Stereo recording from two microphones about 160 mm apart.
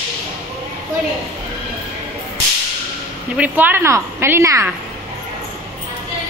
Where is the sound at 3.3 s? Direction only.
10° right (ahead or behind).